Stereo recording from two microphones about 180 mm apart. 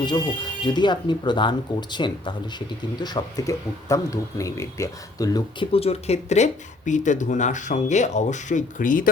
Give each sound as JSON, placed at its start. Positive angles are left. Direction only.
{"t": 0.0, "sound": "speech", "side_deg": 25}
{"t": 5.7, "sound": "speech", "side_deg": 35}